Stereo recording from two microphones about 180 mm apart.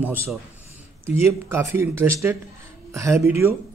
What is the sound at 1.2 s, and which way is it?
Speech, 15° right (ahead or behind).